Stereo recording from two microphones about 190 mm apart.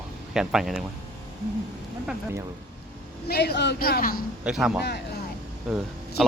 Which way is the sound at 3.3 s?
60° left (ahead or behind).